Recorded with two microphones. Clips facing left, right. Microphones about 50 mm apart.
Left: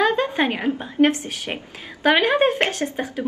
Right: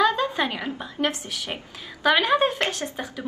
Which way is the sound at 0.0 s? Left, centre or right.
Left.